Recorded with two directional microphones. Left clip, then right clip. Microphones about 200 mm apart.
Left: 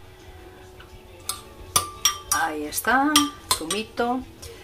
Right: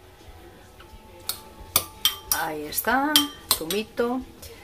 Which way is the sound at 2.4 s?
10° right (ahead or behind).